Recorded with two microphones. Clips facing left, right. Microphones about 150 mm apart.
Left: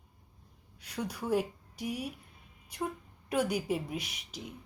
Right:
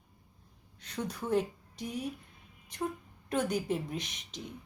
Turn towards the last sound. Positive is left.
turn(degrees=10)  # may be behind; listen again after turning